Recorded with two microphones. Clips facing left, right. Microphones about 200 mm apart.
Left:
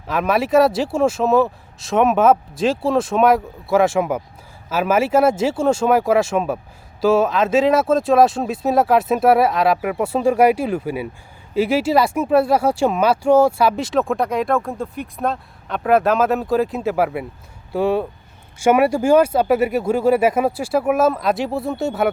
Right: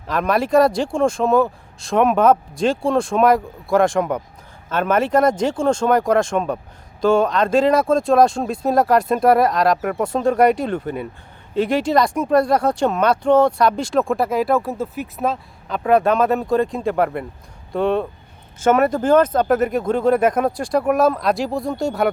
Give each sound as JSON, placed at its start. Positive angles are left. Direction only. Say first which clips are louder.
{"t": 0.1, "sound": "speech", "louder": "even", "side_deg": 5}